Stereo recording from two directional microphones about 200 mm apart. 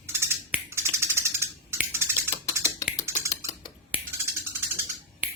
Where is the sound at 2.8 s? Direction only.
15° left (ahead or behind).